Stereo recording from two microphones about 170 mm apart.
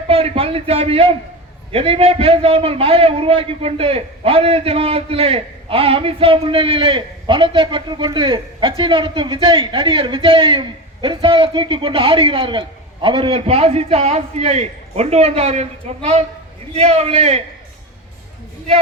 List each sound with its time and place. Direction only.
0.1 s a man's voice: 35° right (ahead or behind)